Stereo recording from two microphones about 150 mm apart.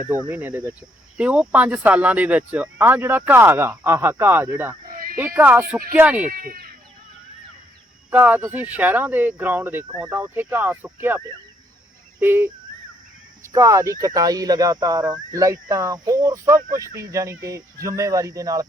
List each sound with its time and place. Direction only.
0.3 s speech: 10° right (ahead or behind)
4.9 s a sound: 70° right (ahead or behind)
5.3 s speech: 10° right (ahead or behind)
6.3 s a sound: 75° right (ahead or behind)
8.1 s speech: 15° right (ahead or behind)
12.2 s speech: 15° right (ahead or behind)
13.5 s speech: 20° right (ahead or behind)